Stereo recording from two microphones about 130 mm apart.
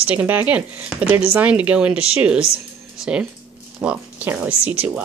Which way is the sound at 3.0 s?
5° right (ahead or behind).